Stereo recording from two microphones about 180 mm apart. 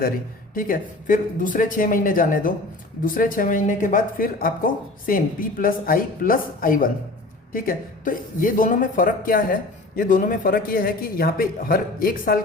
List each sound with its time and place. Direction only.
0.5 s speech: 50° left (ahead or behind)